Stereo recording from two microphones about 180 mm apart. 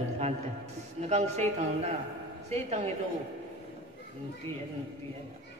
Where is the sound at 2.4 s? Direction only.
35° right (ahead or behind).